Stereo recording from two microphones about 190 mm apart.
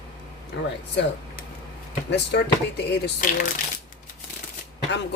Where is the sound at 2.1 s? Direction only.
60° left (ahead or behind).